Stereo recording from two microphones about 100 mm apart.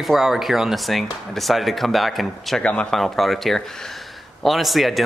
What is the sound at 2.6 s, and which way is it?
Speech, 10° left (ahead or behind).